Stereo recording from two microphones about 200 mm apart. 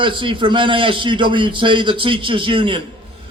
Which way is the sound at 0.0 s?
25° right (ahead or behind).